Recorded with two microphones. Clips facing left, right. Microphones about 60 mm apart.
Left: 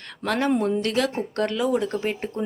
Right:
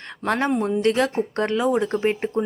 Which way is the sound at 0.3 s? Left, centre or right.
Right.